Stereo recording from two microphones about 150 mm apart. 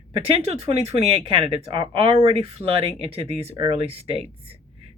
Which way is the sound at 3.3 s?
40° right (ahead or behind).